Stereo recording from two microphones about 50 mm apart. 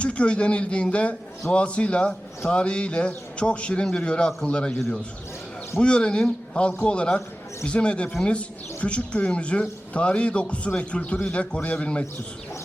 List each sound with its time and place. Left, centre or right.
0.0 s speech: left
5.8 s speech: centre